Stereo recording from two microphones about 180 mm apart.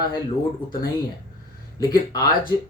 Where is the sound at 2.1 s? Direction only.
20° left (ahead or behind).